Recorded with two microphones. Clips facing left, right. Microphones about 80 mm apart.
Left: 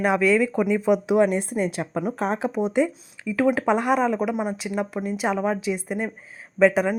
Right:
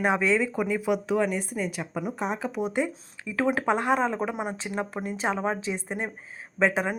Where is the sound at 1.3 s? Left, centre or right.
Left.